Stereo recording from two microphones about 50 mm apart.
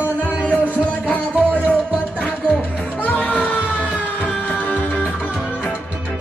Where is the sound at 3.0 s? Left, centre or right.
Left.